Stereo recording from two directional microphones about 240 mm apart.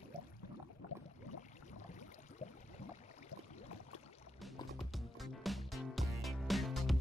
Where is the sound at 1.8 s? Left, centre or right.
Left.